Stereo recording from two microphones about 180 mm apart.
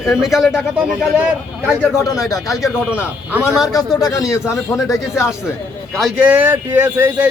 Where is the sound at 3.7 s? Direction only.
20° left (ahead or behind).